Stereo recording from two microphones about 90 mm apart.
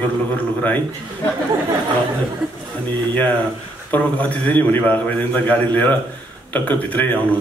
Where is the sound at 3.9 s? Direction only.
15° left (ahead or behind).